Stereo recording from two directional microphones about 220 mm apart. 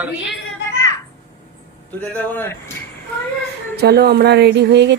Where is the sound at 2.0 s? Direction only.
5° left (ahead or behind).